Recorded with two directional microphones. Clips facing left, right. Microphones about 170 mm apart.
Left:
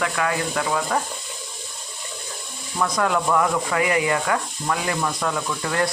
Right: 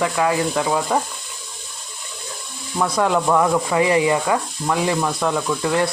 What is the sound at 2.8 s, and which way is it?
Speech, 25° right (ahead or behind).